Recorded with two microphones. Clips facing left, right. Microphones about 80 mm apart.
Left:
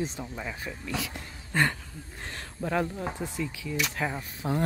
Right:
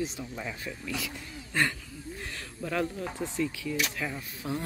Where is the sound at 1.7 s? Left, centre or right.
Left.